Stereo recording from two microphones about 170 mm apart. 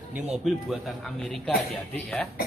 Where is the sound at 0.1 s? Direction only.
Centre (ahead or behind).